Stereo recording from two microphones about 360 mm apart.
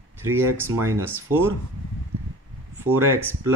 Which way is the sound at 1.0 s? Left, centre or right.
Right.